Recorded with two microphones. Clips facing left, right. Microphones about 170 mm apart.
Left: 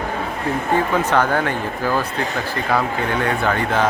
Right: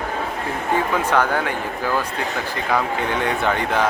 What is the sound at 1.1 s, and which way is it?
Speech, 10° right (ahead or behind).